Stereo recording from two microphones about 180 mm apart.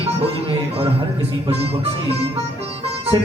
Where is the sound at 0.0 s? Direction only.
35° right (ahead or behind).